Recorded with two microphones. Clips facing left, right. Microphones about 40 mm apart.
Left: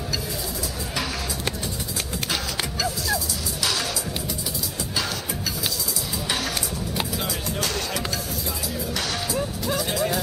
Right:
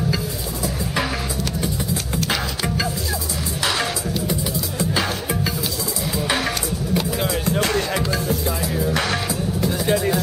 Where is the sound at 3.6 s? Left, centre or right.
Right.